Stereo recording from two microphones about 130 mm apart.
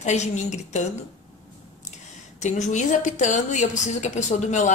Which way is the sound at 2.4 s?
65° left (ahead or behind).